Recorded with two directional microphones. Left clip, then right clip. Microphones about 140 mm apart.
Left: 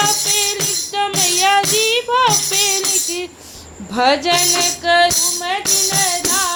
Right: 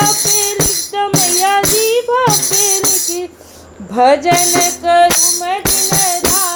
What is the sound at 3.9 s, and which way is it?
Music, 25° right (ahead or behind).